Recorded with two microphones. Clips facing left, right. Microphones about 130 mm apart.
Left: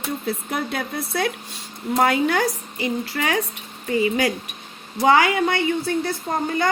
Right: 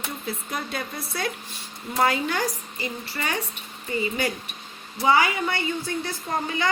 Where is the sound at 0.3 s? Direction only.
65° left (ahead or behind).